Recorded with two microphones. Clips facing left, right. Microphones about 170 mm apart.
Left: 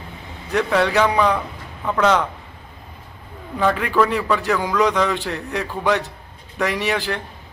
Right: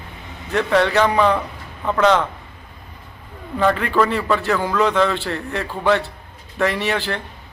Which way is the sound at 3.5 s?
10° left (ahead or behind).